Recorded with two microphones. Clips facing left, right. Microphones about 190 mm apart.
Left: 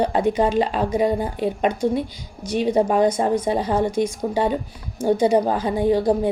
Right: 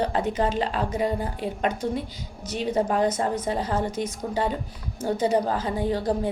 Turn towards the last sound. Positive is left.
turn(degrees=15)  # may be behind; listen again after turning